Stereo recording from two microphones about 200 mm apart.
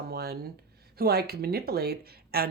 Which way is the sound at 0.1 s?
50° right (ahead or behind).